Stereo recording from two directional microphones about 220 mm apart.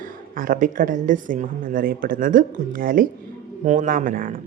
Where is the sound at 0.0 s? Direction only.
40° right (ahead or behind).